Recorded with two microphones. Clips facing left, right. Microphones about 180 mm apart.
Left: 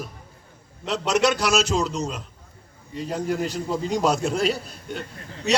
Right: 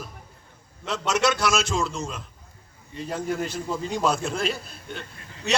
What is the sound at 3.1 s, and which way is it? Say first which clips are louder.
A man's voice: left 2 dB; 40° left (ahead or behind).